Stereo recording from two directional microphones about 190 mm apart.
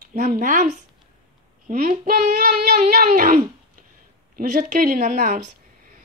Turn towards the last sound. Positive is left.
turn(degrees=-40)  # may be behind; listen again after turning